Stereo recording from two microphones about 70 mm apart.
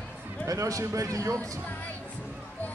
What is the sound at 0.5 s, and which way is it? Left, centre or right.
Speech, right.